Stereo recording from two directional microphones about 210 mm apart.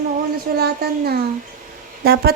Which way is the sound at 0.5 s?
50° right (ahead or behind).